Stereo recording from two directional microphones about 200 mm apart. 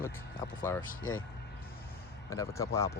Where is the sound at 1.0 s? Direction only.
90° left.